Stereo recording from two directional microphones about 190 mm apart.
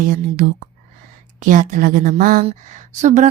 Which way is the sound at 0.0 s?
50° right (ahead or behind).